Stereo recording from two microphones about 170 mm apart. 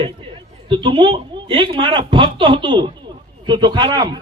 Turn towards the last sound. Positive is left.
turn(degrees=-25)  # may be behind; listen again after turning